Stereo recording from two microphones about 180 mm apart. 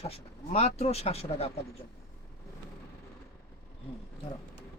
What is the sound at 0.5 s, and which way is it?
Speech, 35° left (ahead or behind).